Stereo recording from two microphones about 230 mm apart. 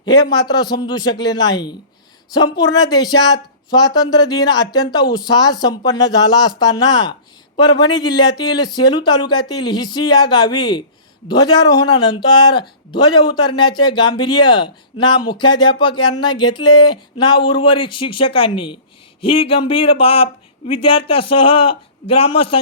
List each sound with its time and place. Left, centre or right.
0.0 s a man's voice: centre